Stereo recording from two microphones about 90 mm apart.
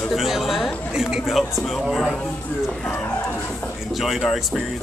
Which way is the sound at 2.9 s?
20° left (ahead or behind).